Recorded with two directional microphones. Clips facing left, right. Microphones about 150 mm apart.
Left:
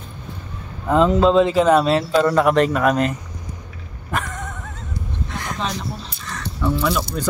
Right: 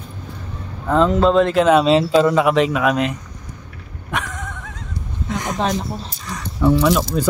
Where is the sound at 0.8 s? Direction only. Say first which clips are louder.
Even; 5° left (ahead or behind).